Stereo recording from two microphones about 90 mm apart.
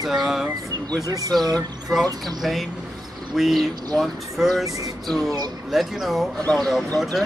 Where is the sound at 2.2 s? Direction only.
Centre (ahead or behind).